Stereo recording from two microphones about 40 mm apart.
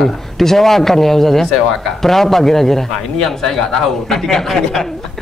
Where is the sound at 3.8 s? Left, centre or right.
Centre.